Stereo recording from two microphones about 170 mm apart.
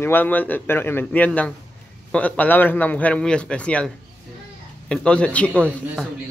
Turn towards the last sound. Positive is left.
turn(degrees=5)  # may be behind; listen again after turning